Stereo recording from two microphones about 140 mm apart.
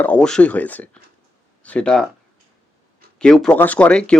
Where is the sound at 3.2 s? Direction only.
5° left (ahead or behind).